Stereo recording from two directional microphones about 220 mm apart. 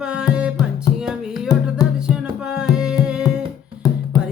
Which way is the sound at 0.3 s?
5° right (ahead or behind).